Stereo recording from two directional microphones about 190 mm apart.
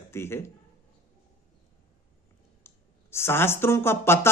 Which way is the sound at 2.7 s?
15° left (ahead or behind).